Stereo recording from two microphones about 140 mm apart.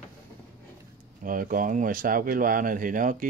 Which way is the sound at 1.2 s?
80° right.